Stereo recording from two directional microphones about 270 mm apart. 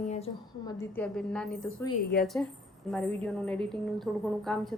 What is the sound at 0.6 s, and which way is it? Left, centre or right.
A woman's voice, centre.